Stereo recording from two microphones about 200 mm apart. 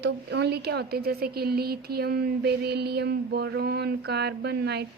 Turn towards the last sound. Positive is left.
turn(degrees=-55)  # may be behind; listen again after turning